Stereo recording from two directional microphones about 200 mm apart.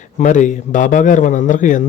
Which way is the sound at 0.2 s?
40° left (ahead or behind).